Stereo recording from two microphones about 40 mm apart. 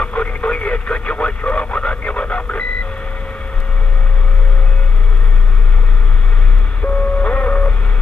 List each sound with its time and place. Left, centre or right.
0.0 s radio: left
6.8 s vehicle: left